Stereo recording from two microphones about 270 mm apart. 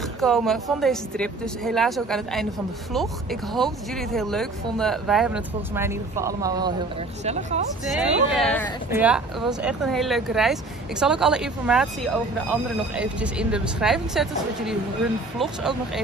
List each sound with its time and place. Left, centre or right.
0.2 s a woman's voice: centre
7.2 s speech: right
8.0 s a woman's voice: centre